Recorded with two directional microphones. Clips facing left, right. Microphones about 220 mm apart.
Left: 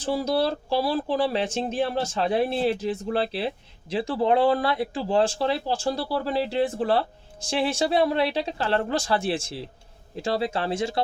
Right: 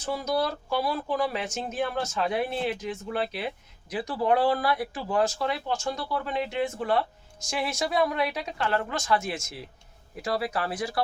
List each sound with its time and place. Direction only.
0.0 s speech: 30° left (ahead or behind)